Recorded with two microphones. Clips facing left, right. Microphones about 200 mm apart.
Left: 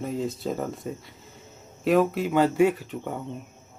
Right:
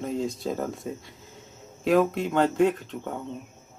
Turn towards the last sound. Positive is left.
turn(degrees=5)  # may be behind; listen again after turning